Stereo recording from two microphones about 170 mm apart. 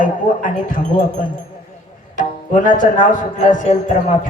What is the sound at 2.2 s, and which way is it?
Speech, 50° left (ahead or behind).